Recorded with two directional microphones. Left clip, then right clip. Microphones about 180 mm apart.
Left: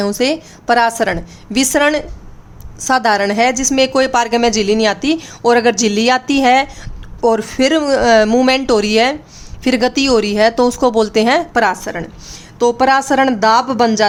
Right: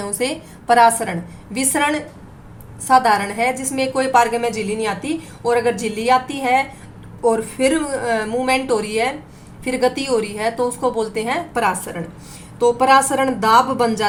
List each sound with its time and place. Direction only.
0.2 s a woman's voice: 50° left (ahead or behind)